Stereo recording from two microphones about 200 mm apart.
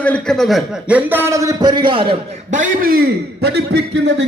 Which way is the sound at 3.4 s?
55° right (ahead or behind).